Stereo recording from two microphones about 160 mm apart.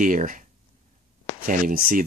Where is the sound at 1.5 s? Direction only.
60° right (ahead or behind).